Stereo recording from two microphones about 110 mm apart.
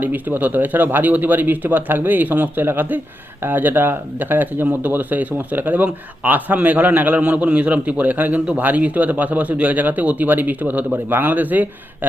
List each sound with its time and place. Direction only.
0.0 s speech: 15° right (ahead or behind)